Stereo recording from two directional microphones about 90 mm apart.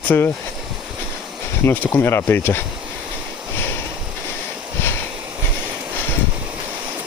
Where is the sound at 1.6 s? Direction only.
25° left (ahead or behind).